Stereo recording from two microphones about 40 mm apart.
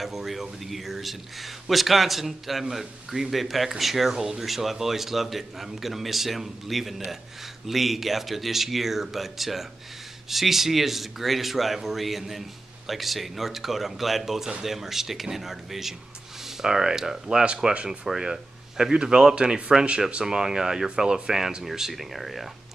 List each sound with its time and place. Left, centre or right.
0.0 s speech: centre
4.1 s speech: centre
4.4 s speech: centre